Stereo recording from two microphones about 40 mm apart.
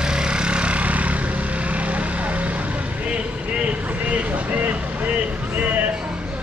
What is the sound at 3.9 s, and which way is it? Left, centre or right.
Vehicle, right.